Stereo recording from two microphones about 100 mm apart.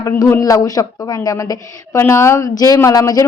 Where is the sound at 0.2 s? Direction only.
35° left (ahead or behind).